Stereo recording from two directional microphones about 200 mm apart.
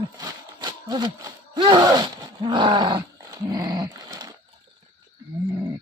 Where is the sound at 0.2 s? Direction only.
20° right (ahead or behind).